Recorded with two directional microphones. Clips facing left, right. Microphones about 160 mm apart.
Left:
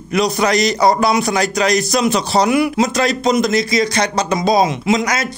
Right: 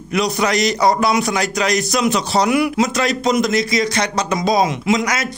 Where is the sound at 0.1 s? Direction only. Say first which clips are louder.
Left 2 dB; 35° left (ahead or behind).